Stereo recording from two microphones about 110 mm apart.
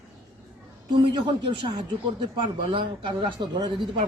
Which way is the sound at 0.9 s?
50° right (ahead or behind).